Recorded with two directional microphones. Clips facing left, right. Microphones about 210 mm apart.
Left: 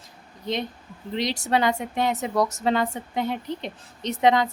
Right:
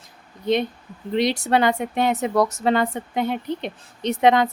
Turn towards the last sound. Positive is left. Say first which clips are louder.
# right 3 dB
turn(degrees=-60)  # may be behind; listen again after turning